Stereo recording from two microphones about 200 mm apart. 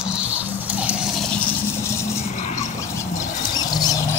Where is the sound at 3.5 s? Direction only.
20° left (ahead or behind).